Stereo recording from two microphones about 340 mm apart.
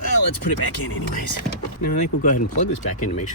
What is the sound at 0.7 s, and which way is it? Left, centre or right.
Speech, left.